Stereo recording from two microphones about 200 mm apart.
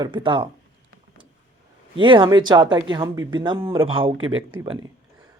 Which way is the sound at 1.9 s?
25° right (ahead or behind).